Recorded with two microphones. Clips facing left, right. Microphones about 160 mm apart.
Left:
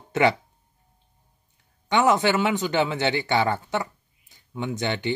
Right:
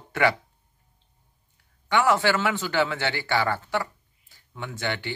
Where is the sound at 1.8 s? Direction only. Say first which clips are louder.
Left 2 dB; 20° left (ahead or behind).